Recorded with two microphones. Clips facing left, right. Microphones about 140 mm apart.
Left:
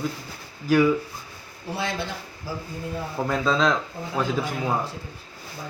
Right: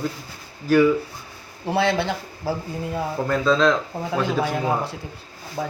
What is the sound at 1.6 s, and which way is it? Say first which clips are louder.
Speech: right 8 dB; 65° right (ahead or behind).